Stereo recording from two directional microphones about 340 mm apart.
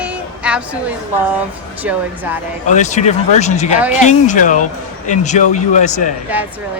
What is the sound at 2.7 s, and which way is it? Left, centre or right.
Speech, left.